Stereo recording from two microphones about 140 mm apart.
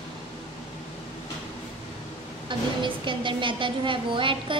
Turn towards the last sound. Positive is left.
turn(degrees=-35)  # may be behind; listen again after turning